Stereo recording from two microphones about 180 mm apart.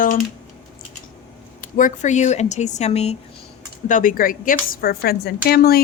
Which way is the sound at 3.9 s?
50° left (ahead or behind).